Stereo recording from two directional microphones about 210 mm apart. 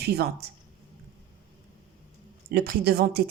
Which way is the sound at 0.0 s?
50° right (ahead or behind).